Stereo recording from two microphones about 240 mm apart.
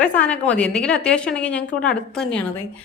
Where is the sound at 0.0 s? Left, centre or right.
Centre.